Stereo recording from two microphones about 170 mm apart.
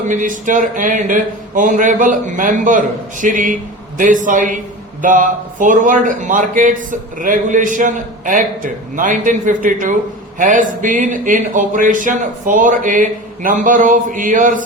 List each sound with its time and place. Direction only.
0.1 s a man's voice: 50° right (ahead or behind)